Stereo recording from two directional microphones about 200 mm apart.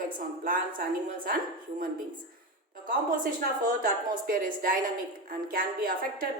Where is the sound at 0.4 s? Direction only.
45° right (ahead or behind).